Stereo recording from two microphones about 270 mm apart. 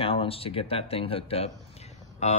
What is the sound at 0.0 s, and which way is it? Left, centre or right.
Speech, left.